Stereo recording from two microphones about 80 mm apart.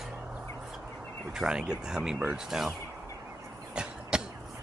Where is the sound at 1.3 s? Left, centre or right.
Centre.